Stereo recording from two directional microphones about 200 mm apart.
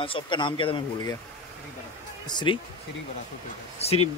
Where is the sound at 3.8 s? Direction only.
30° left (ahead or behind).